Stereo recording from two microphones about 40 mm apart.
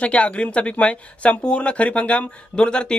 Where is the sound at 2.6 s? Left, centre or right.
Left.